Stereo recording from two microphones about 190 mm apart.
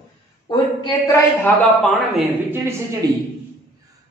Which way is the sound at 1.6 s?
Centre (ahead or behind).